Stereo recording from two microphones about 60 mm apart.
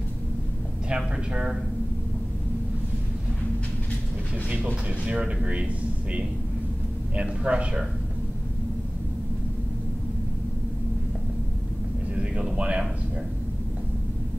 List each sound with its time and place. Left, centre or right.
0.8 s speech: centre
4.5 s speech: right
7.2 s speech: centre
12.2 s speech: centre